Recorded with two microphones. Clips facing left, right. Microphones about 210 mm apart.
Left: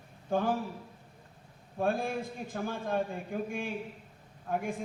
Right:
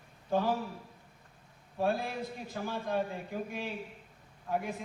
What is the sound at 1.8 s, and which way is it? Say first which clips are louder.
A woman's voice: left 1 dB; 50° left (ahead or behind).